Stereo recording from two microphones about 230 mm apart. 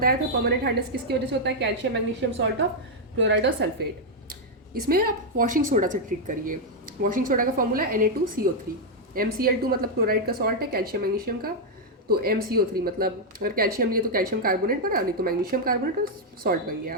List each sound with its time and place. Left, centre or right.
0.0 s a woman's voice: right
4.7 s speech: right